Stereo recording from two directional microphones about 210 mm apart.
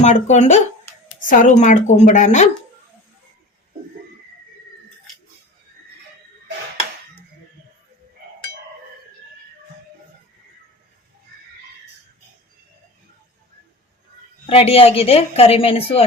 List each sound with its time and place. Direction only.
0.0 s a woman's voice: 35° left (ahead or behind)
14.4 s a woman's voice: 25° left (ahead or behind)